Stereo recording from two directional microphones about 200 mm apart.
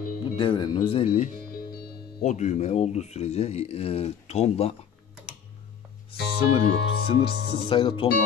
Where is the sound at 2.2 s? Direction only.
35° left (ahead or behind).